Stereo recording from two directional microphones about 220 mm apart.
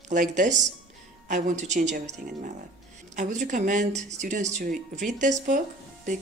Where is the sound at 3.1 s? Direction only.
35° right (ahead or behind).